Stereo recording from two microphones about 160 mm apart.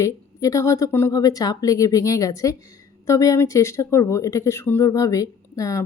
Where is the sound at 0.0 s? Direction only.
20° left (ahead or behind).